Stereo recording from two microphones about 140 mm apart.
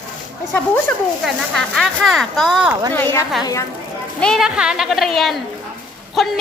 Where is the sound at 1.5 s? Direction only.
Centre (ahead or behind).